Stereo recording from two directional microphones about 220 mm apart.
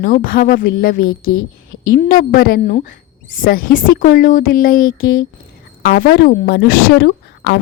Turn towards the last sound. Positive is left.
turn(degrees=50)  # may be behind; listen again after turning